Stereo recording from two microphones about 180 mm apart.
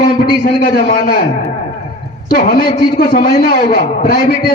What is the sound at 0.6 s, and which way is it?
Speech, 55° left (ahead or behind).